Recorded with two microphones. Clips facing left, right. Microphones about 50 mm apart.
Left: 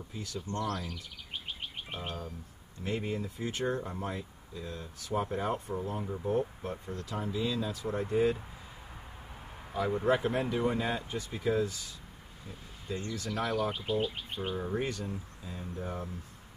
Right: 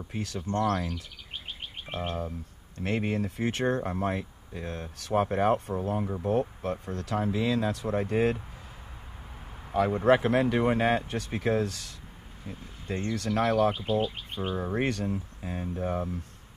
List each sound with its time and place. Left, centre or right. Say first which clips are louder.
0.1 s speech: right 6 dB; right
0.4 s speech: right 7 dB; right
2.8 s speech: right 5 dB; right
9.7 s speech: right 6 dB; right
12.8 s speech: right 6 dB; right
13.7 s speech: right 4 dB; right
14.8 s speech: right 6 dB; right